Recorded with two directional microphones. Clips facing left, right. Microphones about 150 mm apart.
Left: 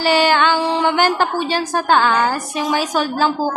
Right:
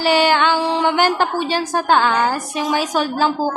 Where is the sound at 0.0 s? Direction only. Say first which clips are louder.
Even; 15° right (ahead or behind).